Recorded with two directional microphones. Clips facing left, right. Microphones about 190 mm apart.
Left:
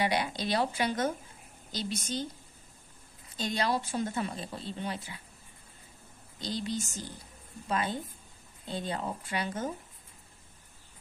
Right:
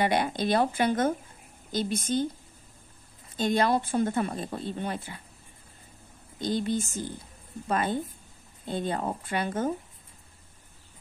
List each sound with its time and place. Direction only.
0.0 s speech: 50° right (ahead or behind)
3.3 s speech: 55° right (ahead or behind)
6.4 s speech: 55° right (ahead or behind)